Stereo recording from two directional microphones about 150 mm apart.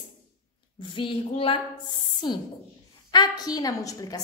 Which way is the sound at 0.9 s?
35° left (ahead or behind).